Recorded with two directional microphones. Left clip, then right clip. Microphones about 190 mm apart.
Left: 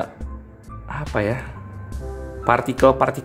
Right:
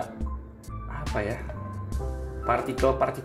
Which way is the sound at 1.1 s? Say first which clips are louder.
Left 8 dB; 35° left (ahead or behind).